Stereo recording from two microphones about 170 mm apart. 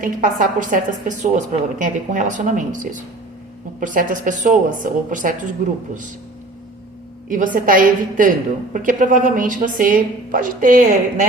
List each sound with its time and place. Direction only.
0.0 s a woman's voice: 50° right (ahead or behind)
7.3 s a woman's voice: 50° right (ahead or behind)